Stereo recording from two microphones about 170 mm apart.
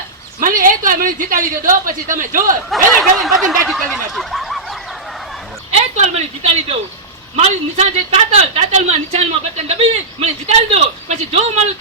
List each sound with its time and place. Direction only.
0.3 s a woman's voice: 55° right (ahead or behind)
2.6 s a sound: centre (ahead or behind)
5.7 s speech: 40° right (ahead or behind)
7.3 s speech: 40° right (ahead or behind)